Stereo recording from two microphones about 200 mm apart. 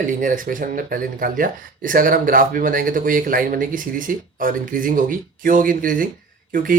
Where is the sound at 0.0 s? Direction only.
40° right (ahead or behind).